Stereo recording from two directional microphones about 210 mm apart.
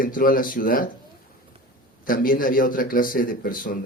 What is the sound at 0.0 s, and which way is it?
Speech, 40° left (ahead or behind).